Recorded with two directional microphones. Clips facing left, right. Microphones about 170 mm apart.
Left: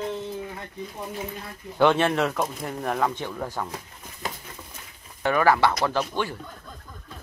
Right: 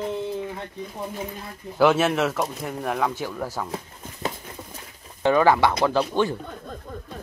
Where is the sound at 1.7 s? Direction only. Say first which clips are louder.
Right 1 dB; 5° right (ahead or behind).